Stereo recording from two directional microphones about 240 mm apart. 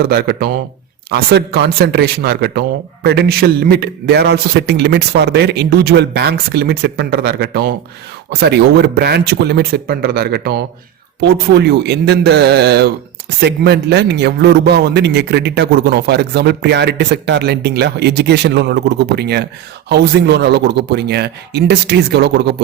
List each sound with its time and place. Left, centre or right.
0.0 s a man's voice: right